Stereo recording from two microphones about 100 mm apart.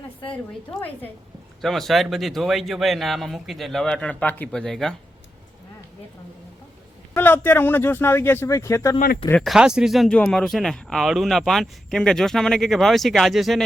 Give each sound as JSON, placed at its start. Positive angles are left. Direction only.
{"t": 1.6, "sound": "speech", "side_deg": 0}
{"t": 7.1, "sound": "speech", "side_deg": 20}
{"t": 9.4, "sound": "speech", "side_deg": -5}